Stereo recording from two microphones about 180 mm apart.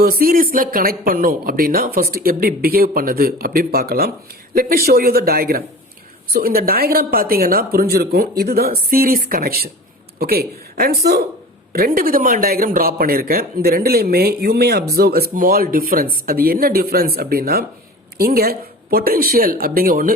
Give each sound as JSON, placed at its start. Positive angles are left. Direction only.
{"t": 0.0, "sound": "speech", "side_deg": -55}